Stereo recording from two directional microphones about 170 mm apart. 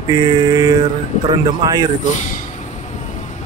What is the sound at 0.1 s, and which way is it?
Mantra, 20° right (ahead or behind).